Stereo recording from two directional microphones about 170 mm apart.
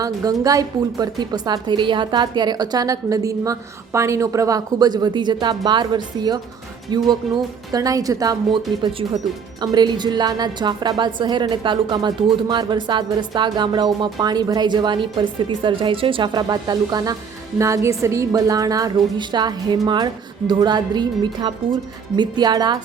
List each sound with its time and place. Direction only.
0.4 s a woman's voice: 20° right (ahead or behind)
8.8 s a woman's voice: 30° right (ahead or behind)